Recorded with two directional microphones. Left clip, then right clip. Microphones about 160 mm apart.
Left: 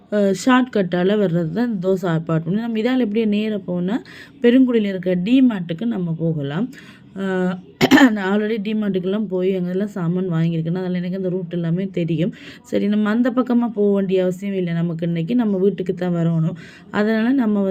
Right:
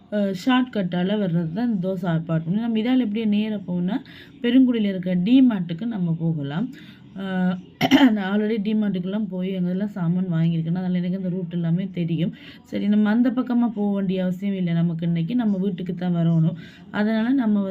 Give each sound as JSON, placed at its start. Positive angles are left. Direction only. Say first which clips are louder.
{"t": 0.1, "sound": "speech", "louder": "left 6 dB", "side_deg": 40}